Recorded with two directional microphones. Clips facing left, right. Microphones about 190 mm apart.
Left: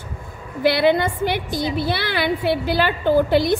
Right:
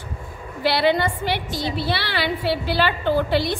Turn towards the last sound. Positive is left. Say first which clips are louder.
# left 4 dB
turn(degrees=45)  # may be behind; listen again after turning